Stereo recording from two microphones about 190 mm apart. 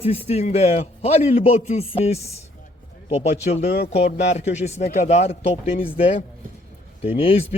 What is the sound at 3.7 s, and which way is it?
Speech, 55° left (ahead or behind).